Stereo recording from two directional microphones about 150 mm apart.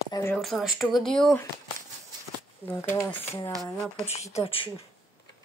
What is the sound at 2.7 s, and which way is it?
Speech, 15° left (ahead or behind).